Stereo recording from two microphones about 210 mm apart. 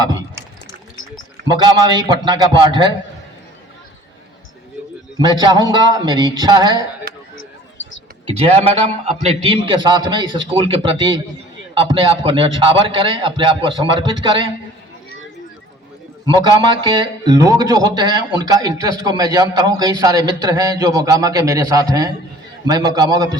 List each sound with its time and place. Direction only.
0.0 s a sound: 20° right (ahead or behind)
1.5 s a man's voice: 20° right (ahead or behind)
5.2 s a man's voice: 20° right (ahead or behind)
8.3 s a man's voice: 25° right (ahead or behind)
16.8 s a man's voice: 20° right (ahead or behind)